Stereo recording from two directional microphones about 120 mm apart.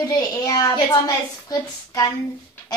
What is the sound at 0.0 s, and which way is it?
A woman's voice, 30° left (ahead or behind).